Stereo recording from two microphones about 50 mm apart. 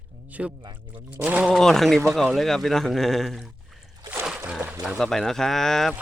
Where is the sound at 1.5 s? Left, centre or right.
Centre.